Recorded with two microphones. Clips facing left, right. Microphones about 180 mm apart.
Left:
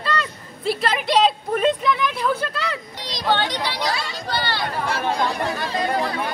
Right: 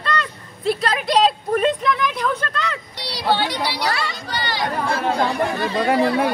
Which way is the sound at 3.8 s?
65° right (ahead or behind).